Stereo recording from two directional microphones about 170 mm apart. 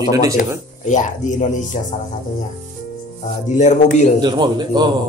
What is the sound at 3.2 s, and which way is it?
Speech, 45° left (ahead or behind).